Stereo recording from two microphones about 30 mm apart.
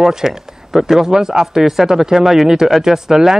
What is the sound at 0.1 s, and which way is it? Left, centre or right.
Speech, centre.